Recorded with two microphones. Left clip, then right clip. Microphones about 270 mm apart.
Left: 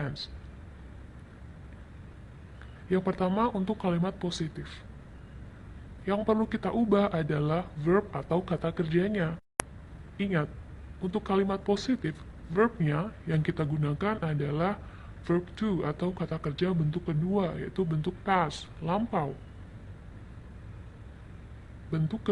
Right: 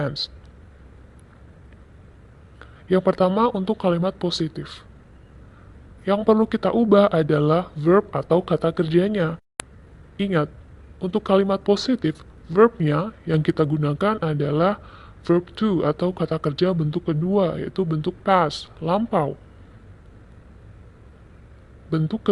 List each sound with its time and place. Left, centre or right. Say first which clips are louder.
0.0 s speech: right 11 dB; right
2.9 s speech: right 10 dB; right
6.1 s speech: right 10 dB; right
21.8 s a man's voice: right 9 dB; right